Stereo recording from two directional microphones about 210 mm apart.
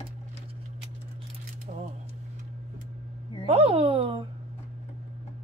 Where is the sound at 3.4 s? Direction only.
30° right (ahead or behind).